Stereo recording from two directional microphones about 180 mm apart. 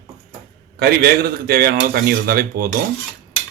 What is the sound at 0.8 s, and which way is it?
A man's voice, 60° right (ahead or behind).